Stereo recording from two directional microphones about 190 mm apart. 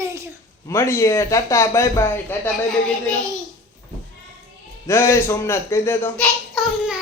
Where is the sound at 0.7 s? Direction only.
15° left (ahead or behind).